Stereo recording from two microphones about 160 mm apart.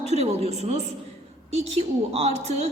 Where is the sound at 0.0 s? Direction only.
40° right (ahead or behind).